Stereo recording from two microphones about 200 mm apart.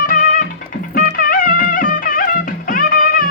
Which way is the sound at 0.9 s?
45° left (ahead or behind).